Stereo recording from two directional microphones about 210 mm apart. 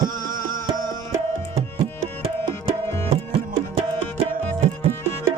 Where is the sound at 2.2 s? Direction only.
30° right (ahead or behind).